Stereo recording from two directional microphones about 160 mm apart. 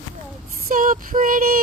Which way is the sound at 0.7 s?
55° right (ahead or behind).